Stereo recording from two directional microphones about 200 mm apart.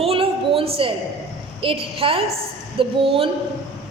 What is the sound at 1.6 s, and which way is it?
A woman's voice, 30° right (ahead or behind).